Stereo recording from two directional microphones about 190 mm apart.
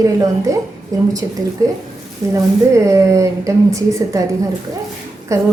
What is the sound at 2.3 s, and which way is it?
Speech, 15° right (ahead or behind).